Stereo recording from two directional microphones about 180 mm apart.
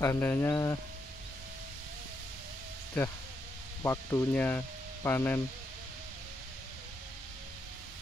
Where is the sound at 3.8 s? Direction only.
15° left (ahead or behind).